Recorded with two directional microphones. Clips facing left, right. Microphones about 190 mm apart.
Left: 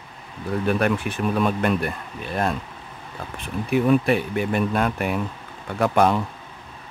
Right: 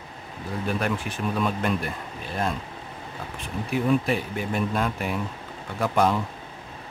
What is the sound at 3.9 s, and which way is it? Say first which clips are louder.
Speech: left 3 dB; 65° left (ahead or behind).